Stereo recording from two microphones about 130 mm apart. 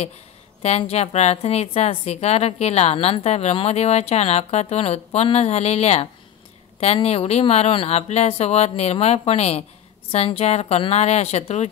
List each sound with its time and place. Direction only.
0.6 s a woman's voice: 55° left (ahead or behind)